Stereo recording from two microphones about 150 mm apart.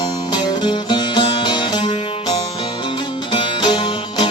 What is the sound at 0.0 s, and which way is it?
Music, 30° left (ahead or behind).